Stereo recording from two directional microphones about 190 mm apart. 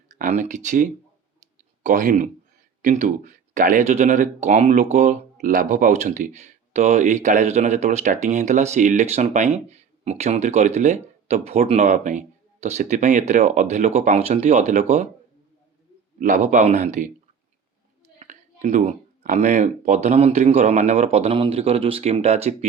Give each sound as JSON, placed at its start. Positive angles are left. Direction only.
{"t": 0.1, "sound": "speech", "side_deg": -40}
{"t": 16.2, "sound": "speech", "side_deg": -40}
{"t": 18.2, "sound": "speech", "side_deg": -40}